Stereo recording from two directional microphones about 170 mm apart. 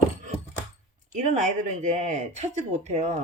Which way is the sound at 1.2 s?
45° right (ahead or behind).